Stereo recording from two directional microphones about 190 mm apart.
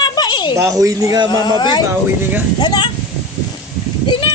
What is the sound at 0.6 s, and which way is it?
Speech, 15° right (ahead or behind).